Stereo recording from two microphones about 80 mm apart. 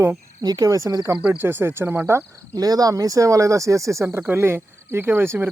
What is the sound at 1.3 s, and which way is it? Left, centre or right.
Speech, right.